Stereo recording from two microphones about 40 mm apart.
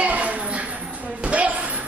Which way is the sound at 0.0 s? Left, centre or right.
Right.